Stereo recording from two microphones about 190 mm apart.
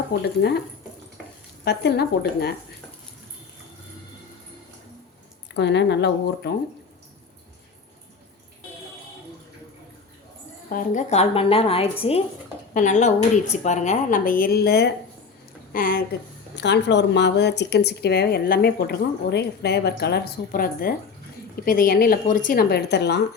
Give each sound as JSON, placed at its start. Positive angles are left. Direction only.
{"t": 0.1, "sound": "speech", "side_deg": 60}
{"t": 1.6, "sound": "speech", "side_deg": 60}
{"t": 5.5, "sound": "speech", "side_deg": 65}
{"t": 10.7, "sound": "a woman's voice", "side_deg": 45}
{"t": 16.6, "sound": "a woman's voice", "side_deg": 65}